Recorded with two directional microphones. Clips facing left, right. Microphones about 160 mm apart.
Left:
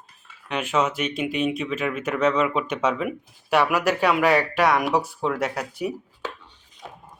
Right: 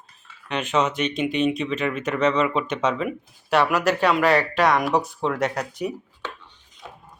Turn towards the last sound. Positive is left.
turn(degrees=5)  # may be behind; listen again after turning